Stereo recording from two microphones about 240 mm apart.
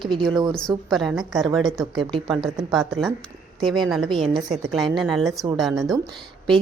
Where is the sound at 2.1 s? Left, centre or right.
Centre.